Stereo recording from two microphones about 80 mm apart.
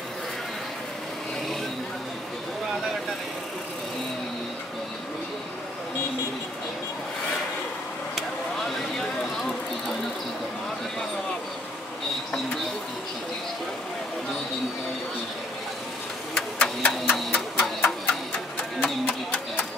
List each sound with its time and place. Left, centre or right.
8.2 s vehicle: centre
16.3 s a sound: centre
18.8 s music: centre